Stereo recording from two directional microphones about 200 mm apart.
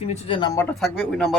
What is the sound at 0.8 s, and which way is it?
Speech, centre (ahead or behind).